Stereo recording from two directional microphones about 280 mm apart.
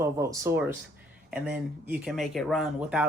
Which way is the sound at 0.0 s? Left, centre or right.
Centre.